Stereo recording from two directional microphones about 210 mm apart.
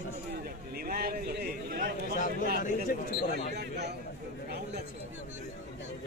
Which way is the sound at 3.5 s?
50° right (ahead or behind).